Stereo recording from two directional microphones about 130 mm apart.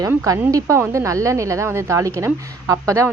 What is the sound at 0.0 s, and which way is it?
A woman's voice, 25° right (ahead or behind).